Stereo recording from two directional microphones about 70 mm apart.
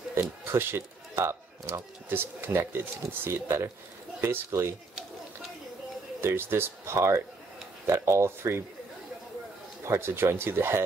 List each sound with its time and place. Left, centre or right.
0.1 s speech: right
6.2 s speech: right
9.8 s speech: right